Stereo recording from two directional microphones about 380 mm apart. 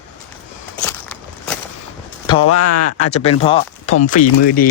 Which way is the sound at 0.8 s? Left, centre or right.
Centre.